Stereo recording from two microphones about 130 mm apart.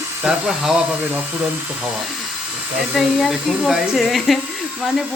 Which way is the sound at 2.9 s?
Centre (ahead or behind).